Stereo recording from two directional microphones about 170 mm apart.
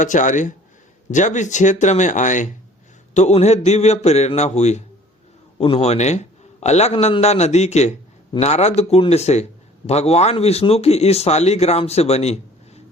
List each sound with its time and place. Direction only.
0.0 s a man's voice: 45° left (ahead or behind)